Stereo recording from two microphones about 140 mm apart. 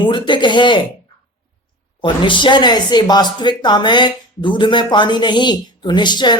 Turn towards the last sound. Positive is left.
turn(degrees=30)  # may be behind; listen again after turning